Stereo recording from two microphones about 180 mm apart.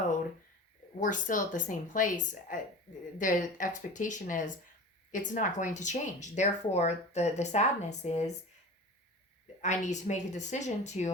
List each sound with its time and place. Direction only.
0.9 s speech: 45° left (ahead or behind)
9.6 s speech: 40° left (ahead or behind)